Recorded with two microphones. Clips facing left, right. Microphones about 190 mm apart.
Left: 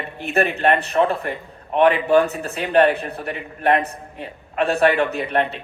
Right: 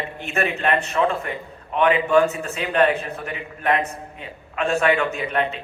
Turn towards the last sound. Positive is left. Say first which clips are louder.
# left 3 dB
turn(degrees=35)  # may be behind; listen again after turning